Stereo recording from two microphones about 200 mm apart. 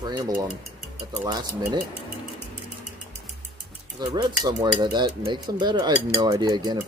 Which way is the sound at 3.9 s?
20° right (ahead or behind).